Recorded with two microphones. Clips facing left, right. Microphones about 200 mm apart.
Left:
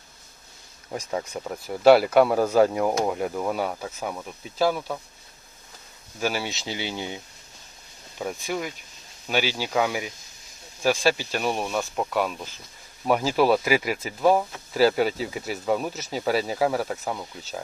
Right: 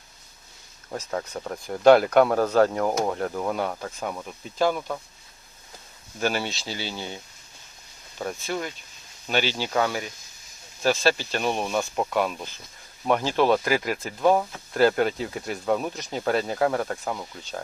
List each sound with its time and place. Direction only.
0.9 s speech: 10° left (ahead or behind)
6.1 s speech: 5° left (ahead or behind)
6.5 s speech: 20° left (ahead or behind)
8.2 s speech: 10° left (ahead or behind)